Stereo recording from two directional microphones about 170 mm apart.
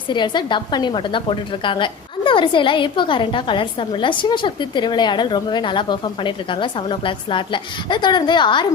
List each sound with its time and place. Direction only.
0.1 s a woman's voice: 25° left (ahead or behind)